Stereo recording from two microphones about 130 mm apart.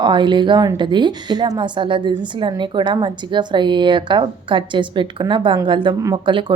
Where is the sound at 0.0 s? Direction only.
35° right (ahead or behind).